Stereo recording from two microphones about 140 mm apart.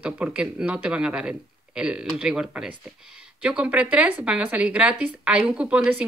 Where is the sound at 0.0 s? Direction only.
10° right (ahead or behind).